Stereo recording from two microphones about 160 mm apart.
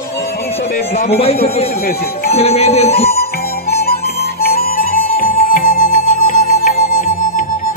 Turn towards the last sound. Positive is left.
turn(degrees=55)  # may be behind; listen again after turning